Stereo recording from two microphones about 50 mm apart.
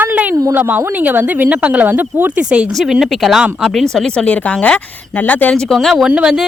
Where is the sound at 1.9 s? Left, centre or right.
Right.